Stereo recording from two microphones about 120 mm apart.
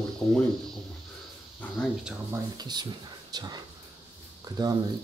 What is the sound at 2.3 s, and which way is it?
Speech, 35° right (ahead or behind).